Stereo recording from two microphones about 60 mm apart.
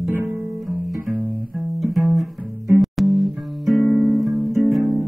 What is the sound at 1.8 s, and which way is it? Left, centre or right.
Music, centre.